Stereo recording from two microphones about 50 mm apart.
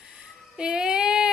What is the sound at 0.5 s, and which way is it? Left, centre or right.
Child singing, centre.